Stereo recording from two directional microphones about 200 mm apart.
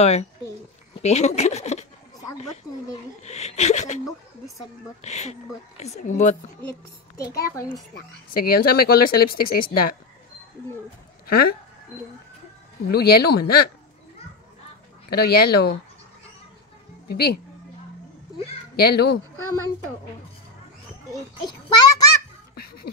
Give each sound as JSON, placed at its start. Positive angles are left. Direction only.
{"t": 0.0, "sound": "a woman's voice", "side_deg": 35}
{"t": 3.3, "sound": "a sound", "side_deg": 35}
{"t": 5.0, "sound": "a woman's voice", "side_deg": 35}
{"t": 8.3, "sound": "speech", "side_deg": 50}
{"t": 11.2, "sound": "speech", "side_deg": 50}
{"t": 12.8, "sound": "speech", "side_deg": 50}
{"t": 15.0, "sound": "speech", "side_deg": 50}
{"t": 17.1, "sound": "speech", "side_deg": 50}
{"t": 18.8, "sound": "speech", "side_deg": 50}
{"t": 21.1, "sound": "a child's voice", "side_deg": 20}